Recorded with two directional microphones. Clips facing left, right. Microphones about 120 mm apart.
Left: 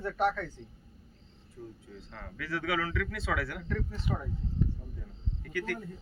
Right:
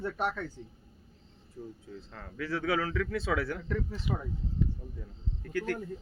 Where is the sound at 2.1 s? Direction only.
35° right (ahead or behind).